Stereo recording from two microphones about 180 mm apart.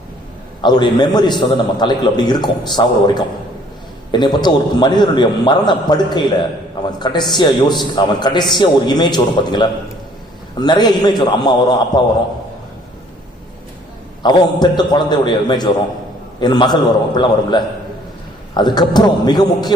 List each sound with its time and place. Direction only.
0.6 s a man's voice: 25° left (ahead or behind)
7.0 s a man's voice: 25° left (ahead or behind)
14.2 s a man's voice: 25° left (ahead or behind)